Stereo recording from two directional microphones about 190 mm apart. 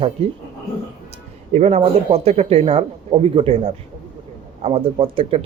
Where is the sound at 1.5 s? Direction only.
35° right (ahead or behind).